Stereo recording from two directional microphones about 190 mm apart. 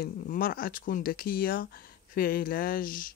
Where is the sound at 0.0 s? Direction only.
50° left (ahead or behind).